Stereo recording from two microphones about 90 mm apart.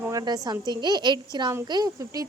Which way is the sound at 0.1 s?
45° right (ahead or behind).